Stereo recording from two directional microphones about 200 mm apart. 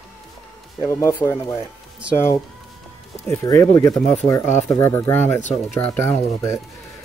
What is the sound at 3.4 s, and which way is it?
Speech, 15° left (ahead or behind).